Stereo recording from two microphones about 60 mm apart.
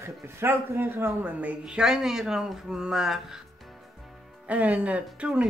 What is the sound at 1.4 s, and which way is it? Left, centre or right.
Speech, right.